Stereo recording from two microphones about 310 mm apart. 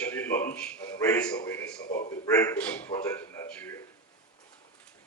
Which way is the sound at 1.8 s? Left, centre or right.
Left.